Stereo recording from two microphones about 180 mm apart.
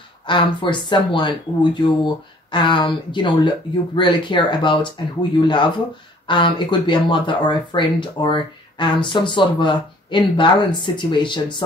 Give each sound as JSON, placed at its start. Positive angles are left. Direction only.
{"t": 0.3, "sound": "speech", "side_deg": 25}
{"t": 6.2, "sound": "speech", "side_deg": 25}